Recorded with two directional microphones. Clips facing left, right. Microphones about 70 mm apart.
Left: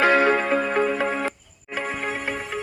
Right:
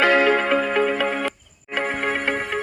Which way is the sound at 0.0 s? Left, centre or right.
Right.